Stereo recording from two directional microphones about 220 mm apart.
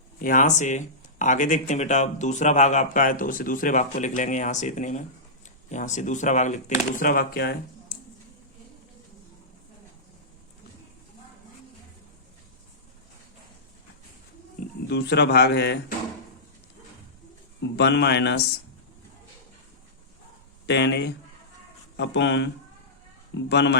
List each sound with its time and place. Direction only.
0.2 s a man's voice: 35° left (ahead or behind)
14.8 s a man's voice: 50° left (ahead or behind)
17.6 s a man's voice: 50° left (ahead or behind)
20.7 s a man's voice: 50° left (ahead or behind)